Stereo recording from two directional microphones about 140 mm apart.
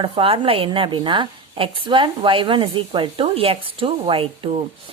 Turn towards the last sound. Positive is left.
turn(degrees=-45)  # may be behind; listen again after turning